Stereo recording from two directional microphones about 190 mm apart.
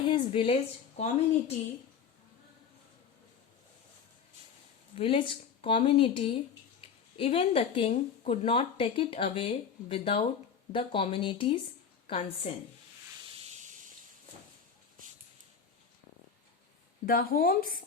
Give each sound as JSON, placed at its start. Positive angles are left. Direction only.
{"t": 0.1, "sound": "a woman's voice", "side_deg": 30}
{"t": 4.9, "sound": "a woman's voice", "side_deg": 30}
{"t": 13.3, "sound": "a sound", "side_deg": -35}
{"t": 17.1, "sound": "speech", "side_deg": 50}